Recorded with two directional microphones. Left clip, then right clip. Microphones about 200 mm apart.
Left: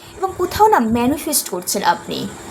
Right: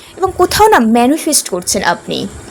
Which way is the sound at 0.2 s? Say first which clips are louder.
Right 5 dB; 40° right (ahead or behind).